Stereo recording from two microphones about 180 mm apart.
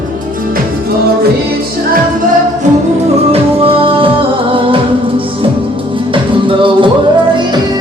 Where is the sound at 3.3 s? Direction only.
30° right (ahead or behind).